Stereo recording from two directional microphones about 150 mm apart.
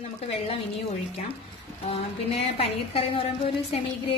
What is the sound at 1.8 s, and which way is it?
A woman's voice, 40° left (ahead or behind).